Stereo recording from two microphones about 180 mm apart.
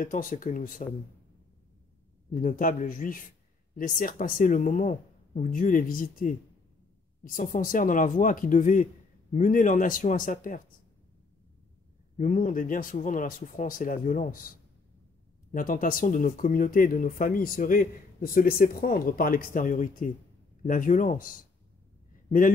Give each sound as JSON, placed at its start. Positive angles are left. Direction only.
{"t": 0.0, "sound": "speech", "side_deg": 50}
{"t": 2.4, "sound": "speech", "side_deg": 45}
{"t": 12.2, "sound": "speech", "side_deg": 45}
{"t": 15.5, "sound": "speech", "side_deg": 50}